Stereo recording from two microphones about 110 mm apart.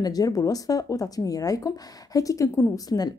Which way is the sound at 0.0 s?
35° left (ahead or behind).